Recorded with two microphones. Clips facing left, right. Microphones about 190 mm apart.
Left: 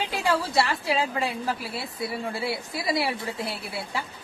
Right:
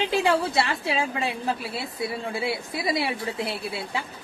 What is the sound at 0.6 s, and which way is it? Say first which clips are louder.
A woman's voice: left 1 dB; 25° right (ahead or behind).